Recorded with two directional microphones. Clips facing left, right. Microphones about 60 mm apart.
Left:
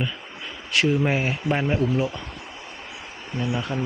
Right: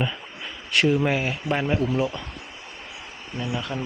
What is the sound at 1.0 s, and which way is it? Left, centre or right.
Speech, centre.